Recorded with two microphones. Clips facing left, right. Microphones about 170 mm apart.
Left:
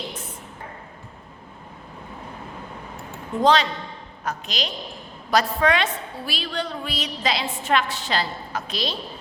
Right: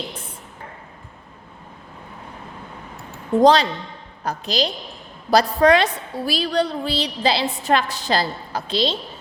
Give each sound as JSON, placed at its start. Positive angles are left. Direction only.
{"t": 3.4, "sound": "a woman's voice", "side_deg": -35}